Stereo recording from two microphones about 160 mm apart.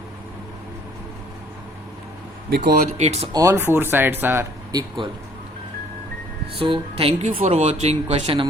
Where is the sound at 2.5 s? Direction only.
90° right.